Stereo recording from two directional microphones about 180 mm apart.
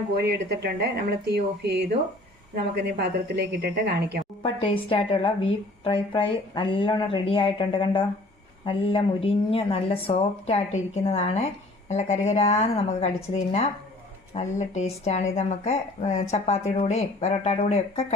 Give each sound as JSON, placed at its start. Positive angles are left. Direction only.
{"t": 0.2, "sound": "speech", "side_deg": -65}
{"t": 4.4, "sound": "a woman's voice", "side_deg": 30}